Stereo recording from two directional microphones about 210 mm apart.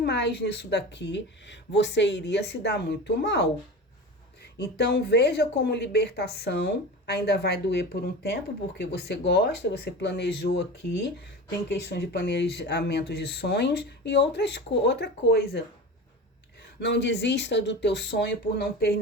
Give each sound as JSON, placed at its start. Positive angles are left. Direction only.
{"t": 0.0, "sound": "a woman's voice", "side_deg": 50}
{"t": 4.5, "sound": "speech", "side_deg": 55}
{"t": 11.7, "sound": "speech", "side_deg": 55}
{"t": 16.8, "sound": "a woman's voice", "side_deg": 55}